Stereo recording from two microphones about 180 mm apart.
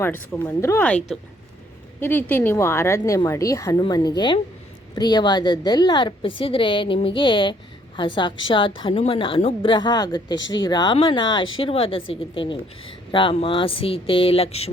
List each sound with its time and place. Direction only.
0.0 s a woman's voice: 10° left (ahead or behind); by 14.7 s 35° left (ahead or behind)